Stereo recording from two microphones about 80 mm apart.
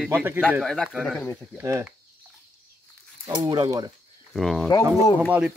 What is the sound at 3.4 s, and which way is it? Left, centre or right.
Speech, right.